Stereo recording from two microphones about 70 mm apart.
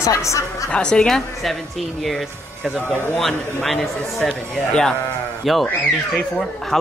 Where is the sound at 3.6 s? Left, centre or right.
Centre.